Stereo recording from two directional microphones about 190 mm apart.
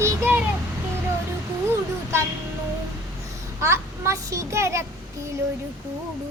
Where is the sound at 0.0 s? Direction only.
10° right (ahead or behind).